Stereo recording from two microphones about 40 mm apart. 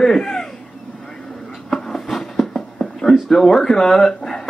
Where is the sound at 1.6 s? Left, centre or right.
Centre.